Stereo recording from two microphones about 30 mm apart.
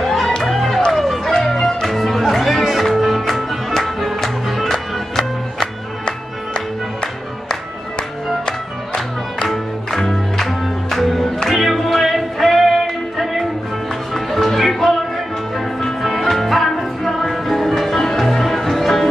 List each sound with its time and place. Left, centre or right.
0.0 s music: centre
6.0 s music: left
9.5 s music: centre
16.2 s music: centre